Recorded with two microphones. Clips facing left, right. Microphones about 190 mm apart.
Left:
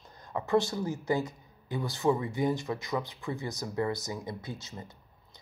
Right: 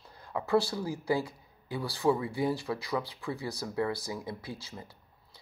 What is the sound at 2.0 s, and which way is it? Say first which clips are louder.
Speech: even; 5° right (ahead or behind).